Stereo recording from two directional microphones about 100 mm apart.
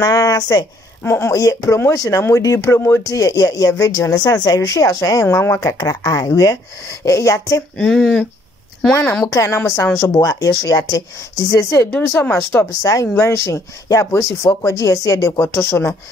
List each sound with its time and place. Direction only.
0.0 s a woman's voice: 35° left (ahead or behind)
1.0 s speech: 25° left (ahead or behind)
3.1 s a woman's voice: 35° left (ahead or behind)
7.7 s speech: 5° left (ahead or behind)
9.2 s a woman's voice: 30° left (ahead or behind)
11.9 s speech: 15° left (ahead or behind)
12.8 s a woman's voice: 35° left (ahead or behind)
15.4 s speech: 25° left (ahead or behind)